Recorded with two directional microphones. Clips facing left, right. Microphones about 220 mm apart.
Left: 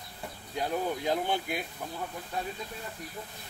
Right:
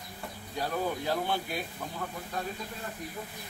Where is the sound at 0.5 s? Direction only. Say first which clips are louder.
Left 1 dB; 15° left (ahead or behind).